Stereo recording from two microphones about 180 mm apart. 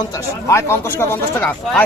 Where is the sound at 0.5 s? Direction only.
15° left (ahead or behind).